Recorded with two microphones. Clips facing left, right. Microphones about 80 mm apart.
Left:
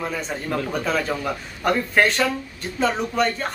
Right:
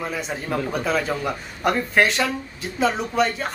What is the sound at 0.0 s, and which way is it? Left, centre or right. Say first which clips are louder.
Speech: even; centre.